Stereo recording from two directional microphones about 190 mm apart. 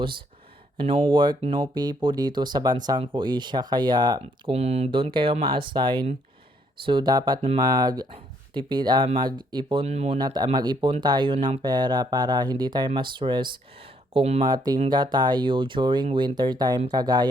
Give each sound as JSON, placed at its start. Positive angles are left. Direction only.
{"t": 0.8, "sound": "speech", "side_deg": -30}
{"t": 10.2, "sound": "speech", "side_deg": -25}